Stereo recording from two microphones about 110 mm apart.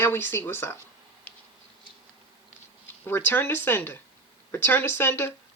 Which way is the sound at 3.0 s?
20° left (ahead or behind).